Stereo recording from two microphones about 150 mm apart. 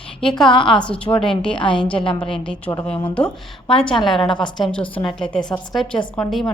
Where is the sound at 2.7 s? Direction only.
20° left (ahead or behind).